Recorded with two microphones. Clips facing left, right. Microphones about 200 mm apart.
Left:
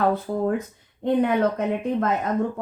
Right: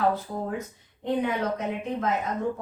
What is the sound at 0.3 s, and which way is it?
Speech, 65° left (ahead or behind).